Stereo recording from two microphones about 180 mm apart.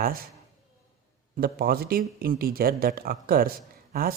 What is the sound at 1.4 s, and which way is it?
Speech, 55° right (ahead or behind).